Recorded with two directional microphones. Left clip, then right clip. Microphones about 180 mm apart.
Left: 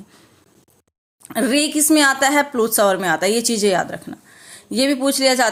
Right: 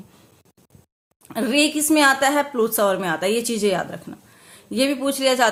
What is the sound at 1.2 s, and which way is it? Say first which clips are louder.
A woman's voice: left 1 dB; 35° left (ahead or behind).